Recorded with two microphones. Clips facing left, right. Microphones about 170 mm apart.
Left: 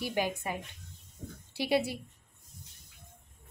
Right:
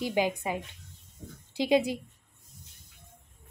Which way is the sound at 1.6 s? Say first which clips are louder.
Right 4 dB; 15° right (ahead or behind).